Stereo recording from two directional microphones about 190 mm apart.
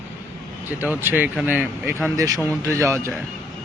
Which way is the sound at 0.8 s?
10° right (ahead or behind).